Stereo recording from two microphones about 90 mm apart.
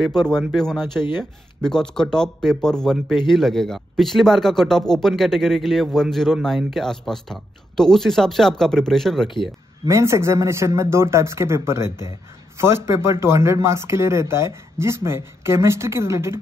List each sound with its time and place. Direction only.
0.1 s speech: 50° left (ahead or behind)
0.5 s speech: 5° left (ahead or behind)
9.8 s speech: 35° right (ahead or behind)